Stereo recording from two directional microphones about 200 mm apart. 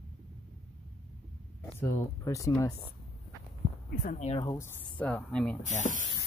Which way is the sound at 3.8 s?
45° left (ahead or behind).